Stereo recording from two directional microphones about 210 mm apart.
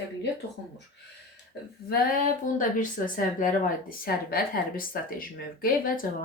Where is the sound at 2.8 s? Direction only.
40° left (ahead or behind).